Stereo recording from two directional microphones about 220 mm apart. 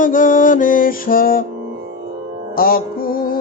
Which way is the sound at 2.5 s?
40° left (ahead or behind).